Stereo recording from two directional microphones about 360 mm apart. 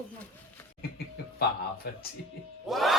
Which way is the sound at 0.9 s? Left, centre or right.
Left.